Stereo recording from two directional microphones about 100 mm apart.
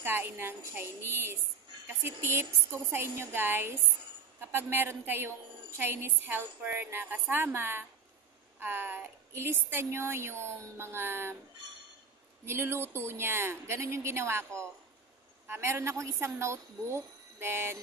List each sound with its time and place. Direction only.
0.0 s a woman's voice: 20° right (ahead or behind)
12.4 s a woman's voice: 25° right (ahead or behind)